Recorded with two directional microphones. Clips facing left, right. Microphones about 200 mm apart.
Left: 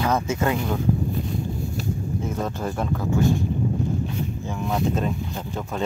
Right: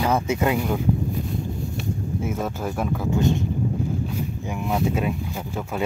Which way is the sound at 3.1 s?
20° right (ahead or behind).